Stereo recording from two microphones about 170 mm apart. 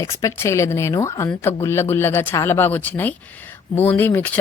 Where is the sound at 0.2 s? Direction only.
15° left (ahead or behind).